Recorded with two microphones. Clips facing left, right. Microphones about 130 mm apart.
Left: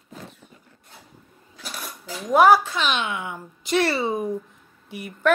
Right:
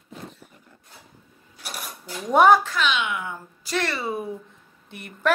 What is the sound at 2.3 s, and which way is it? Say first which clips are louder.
Speech: left 1 dB; centre (ahead or behind).